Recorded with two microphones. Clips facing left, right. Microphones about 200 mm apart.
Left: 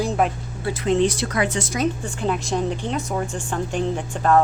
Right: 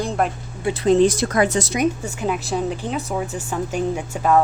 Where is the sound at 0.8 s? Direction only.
40° right (ahead or behind).